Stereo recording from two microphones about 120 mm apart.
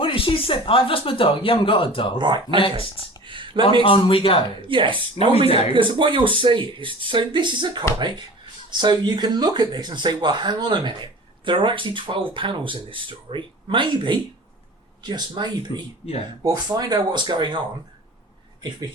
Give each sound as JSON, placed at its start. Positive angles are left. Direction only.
{"t": 0.0, "sound": "speech", "side_deg": 45}
{"t": 2.1, "sound": "speech", "side_deg": -40}
{"t": 2.6, "sound": "speech", "side_deg": 45}
{"t": 3.2, "sound": "a sound", "side_deg": -45}
{"t": 3.8, "sound": "speech", "side_deg": 50}
{"t": 4.7, "sound": "speech", "side_deg": -45}